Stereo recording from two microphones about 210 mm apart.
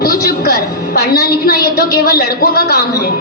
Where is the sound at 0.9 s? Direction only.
50° left (ahead or behind).